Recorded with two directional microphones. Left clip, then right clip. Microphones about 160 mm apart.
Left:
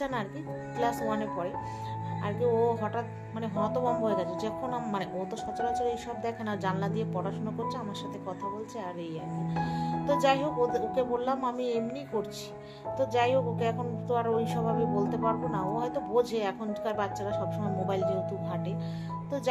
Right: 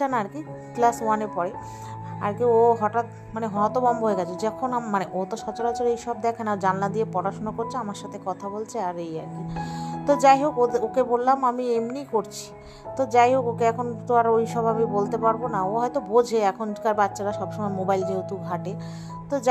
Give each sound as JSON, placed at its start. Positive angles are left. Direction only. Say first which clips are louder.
{"t": 0.0, "sound": "speech", "louder": "right 8 dB", "side_deg": -40}
{"t": 9.6, "sound": "music", "louder": "even", "side_deg": -45}
{"t": 10.0, "sound": "speech", "louder": "right 9 dB", "side_deg": -45}